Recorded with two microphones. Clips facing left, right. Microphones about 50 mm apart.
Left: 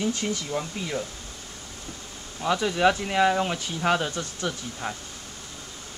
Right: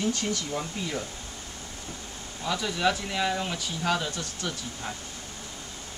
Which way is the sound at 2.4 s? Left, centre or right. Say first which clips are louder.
Left 5 dB; centre.